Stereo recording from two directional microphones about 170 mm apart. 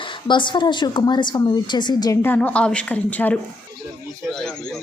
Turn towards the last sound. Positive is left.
turn(degrees=10)  # may be behind; listen again after turning